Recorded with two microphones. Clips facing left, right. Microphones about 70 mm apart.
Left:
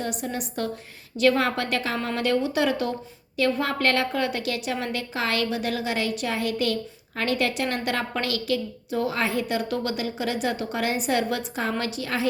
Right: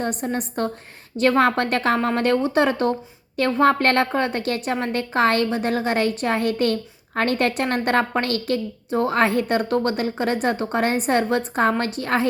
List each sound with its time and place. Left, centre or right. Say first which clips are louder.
0.0 s a woman's voice: right 5 dB; right